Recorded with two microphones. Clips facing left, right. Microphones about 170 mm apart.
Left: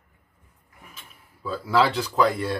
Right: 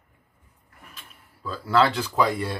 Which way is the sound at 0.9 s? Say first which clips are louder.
Even; 10° left (ahead or behind).